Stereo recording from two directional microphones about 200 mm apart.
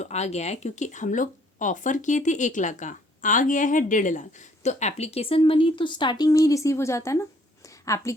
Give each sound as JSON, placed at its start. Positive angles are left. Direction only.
{"t": 0.0, "sound": "a woman's voice", "side_deg": 35}